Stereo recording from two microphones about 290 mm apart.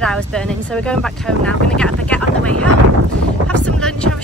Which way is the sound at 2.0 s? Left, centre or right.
Centre.